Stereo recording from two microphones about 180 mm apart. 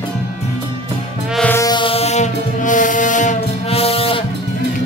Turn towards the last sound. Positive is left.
turn(degrees=30)  # may be behind; listen again after turning